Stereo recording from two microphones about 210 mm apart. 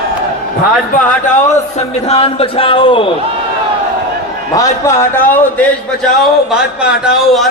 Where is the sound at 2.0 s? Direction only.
30° left (ahead or behind).